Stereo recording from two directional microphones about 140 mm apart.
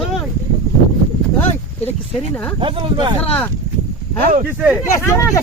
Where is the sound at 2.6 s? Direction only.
35° right (ahead or behind).